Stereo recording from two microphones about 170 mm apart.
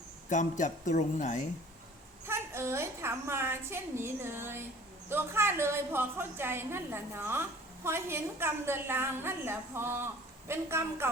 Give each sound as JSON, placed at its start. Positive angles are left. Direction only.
{"t": 0.3, "sound": "speech", "side_deg": 45}
{"t": 2.2, "sound": "a woman's voice", "side_deg": -15}